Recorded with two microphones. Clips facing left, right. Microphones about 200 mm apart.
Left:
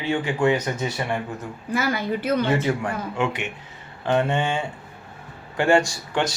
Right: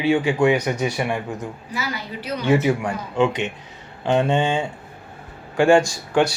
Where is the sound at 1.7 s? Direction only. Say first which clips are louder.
Left 7 dB; 50° left (ahead or behind).